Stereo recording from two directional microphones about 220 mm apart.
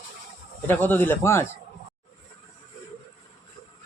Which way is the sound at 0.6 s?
10° left (ahead or behind).